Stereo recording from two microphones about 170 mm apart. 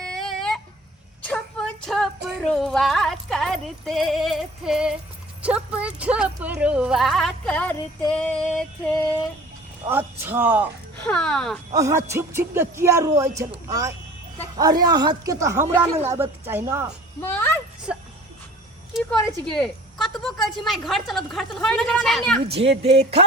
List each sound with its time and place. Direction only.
0.0 s a sound: 5° left (ahead or behind)
5.4 s a woman's voice: 5° right (ahead or behind)
8.1 s music: 5° left (ahead or behind)
10.2 s a man's voice: 10° right (ahead or behind)
11.0 s a woman's voice: 5° left (ahead or behind)
11.7 s a man's voice: 20° right (ahead or behind)
17.2 s music: 10° left (ahead or behind)
19.5 s a woman's voice: 5° left (ahead or behind)
22.4 s speech: 35° right (ahead or behind)